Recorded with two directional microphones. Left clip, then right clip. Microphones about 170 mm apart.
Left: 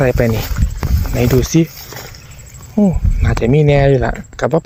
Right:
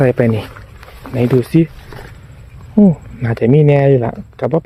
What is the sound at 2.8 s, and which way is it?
Speech, 30° right (ahead or behind).